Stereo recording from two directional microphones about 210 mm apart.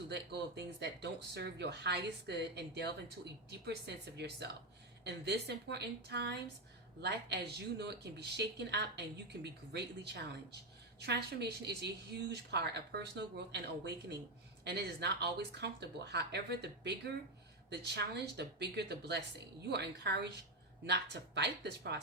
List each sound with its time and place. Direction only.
0.1 s a woman's voice: 50° right (ahead or behind)